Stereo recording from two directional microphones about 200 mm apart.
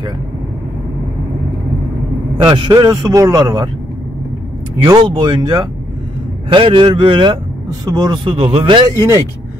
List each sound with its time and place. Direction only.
2.3 s a man's voice: 25° right (ahead or behind)
4.8 s a man's voice: 20° right (ahead or behind)